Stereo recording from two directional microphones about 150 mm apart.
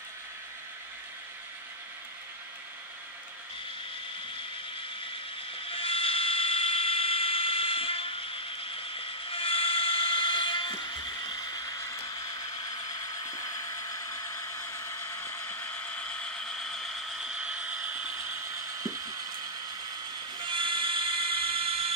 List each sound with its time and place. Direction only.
5.7 s fire alarm: 40° left (ahead or behind)
9.3 s steam whistle: 35° left (ahead or behind)
11.2 s a sound: 25° left (ahead or behind)
15.5 s mechanisms: 10° left (ahead or behind); by 18.1 s 10° right (ahead or behind)
20.4 s fire alarm: 35° right (ahead or behind)